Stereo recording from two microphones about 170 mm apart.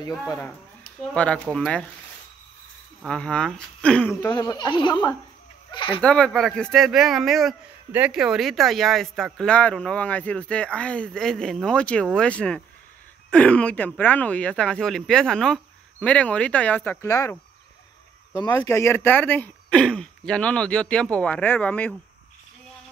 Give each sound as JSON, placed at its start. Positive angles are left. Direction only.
{"t": 1.1, "sound": "speech", "side_deg": 5}
{"t": 3.0, "sound": "speech", "side_deg": 5}
{"t": 4.2, "sound": "speech", "side_deg": 20}
{"t": 5.9, "sound": "speech", "side_deg": 5}